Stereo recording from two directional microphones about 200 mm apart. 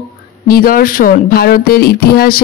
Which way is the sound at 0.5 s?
45° left (ahead or behind).